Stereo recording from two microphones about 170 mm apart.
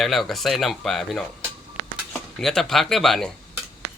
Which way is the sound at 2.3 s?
Centre (ahead or behind).